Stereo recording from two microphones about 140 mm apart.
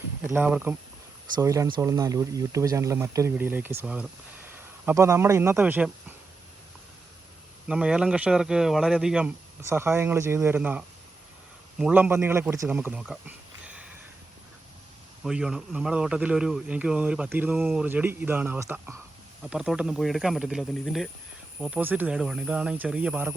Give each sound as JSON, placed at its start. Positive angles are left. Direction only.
{"t": 0.3, "sound": "speech", "side_deg": -15}
{"t": 1.4, "sound": "a man's voice", "side_deg": -25}
{"t": 7.7, "sound": "a man's voice", "side_deg": -5}
{"t": 9.6, "sound": "a man's voice", "side_deg": -15}
{"t": 15.2, "sound": "a man's voice", "side_deg": -5}
{"t": 19.4, "sound": "a man's voice", "side_deg": -5}